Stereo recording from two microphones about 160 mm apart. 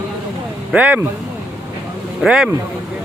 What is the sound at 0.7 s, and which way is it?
Speech, 10° right (ahead or behind).